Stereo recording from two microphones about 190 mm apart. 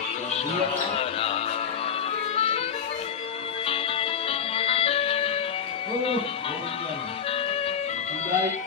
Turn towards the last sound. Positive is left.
turn(degrees=30)  # may be behind; listen again after turning